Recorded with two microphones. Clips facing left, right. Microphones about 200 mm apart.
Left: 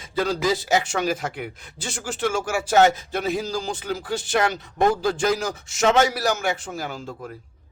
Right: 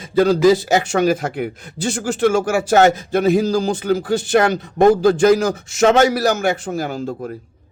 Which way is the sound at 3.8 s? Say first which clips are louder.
Right 9 dB; 45° right (ahead or behind).